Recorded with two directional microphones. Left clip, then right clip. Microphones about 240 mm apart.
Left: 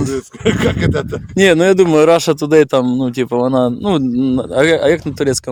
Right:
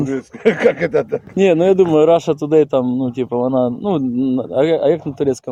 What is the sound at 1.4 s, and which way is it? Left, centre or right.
Speech, left.